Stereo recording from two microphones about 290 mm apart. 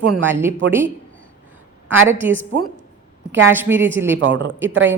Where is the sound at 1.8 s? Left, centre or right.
Right.